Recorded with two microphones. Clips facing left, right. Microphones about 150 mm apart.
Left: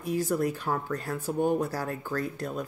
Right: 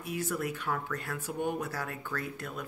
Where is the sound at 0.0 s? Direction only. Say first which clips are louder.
Left 7 dB; 35° left (ahead or behind).